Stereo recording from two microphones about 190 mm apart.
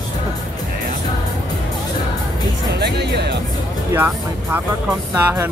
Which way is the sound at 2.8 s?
60° right (ahead or behind).